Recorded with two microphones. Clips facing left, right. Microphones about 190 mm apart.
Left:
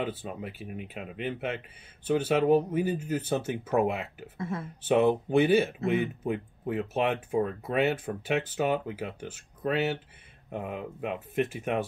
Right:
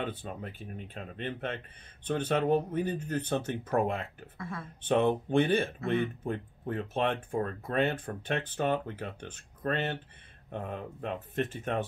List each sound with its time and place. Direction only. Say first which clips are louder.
0.0 s speech: left 3 dB; 5° left (ahead or behind)
4.4 s speech: left 6 dB; 25° left (ahead or behind)
4.8 s speech: left 3 dB; 5° left (ahead or behind)